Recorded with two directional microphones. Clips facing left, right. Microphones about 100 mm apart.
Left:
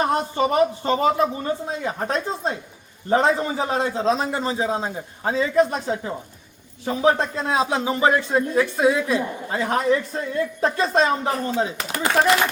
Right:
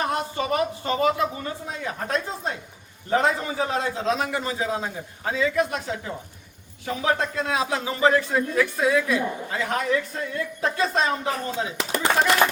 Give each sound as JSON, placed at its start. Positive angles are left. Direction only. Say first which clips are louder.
{"t": 0.0, "sound": "a man's voice", "louder": "left 5 dB", "side_deg": 35}